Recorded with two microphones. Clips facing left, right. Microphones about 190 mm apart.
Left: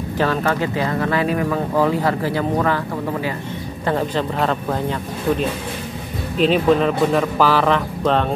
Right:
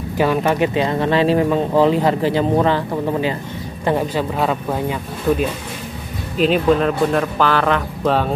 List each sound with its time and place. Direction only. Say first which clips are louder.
0.2 s speech: right 3 dB; 15° right (ahead or behind)
3.8 s speech: right 2 dB; 10° right (ahead or behind)
6.3 s speech: even; centre (ahead or behind)